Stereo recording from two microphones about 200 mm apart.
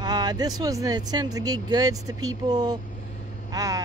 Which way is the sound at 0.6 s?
15° right (ahead or behind).